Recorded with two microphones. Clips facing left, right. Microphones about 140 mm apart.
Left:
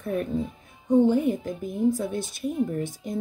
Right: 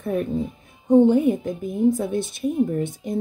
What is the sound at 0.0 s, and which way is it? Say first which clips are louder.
Speech: right 3 dB; 10° right (ahead or behind).